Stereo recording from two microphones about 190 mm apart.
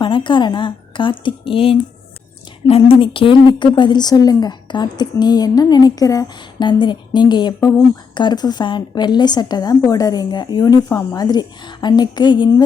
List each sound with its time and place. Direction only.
0.0 s speech: 25° left (ahead or behind)